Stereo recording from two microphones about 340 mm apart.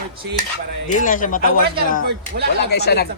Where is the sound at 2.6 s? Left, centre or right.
Left.